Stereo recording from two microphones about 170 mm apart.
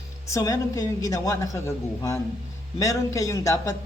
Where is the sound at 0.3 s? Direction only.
20° left (ahead or behind).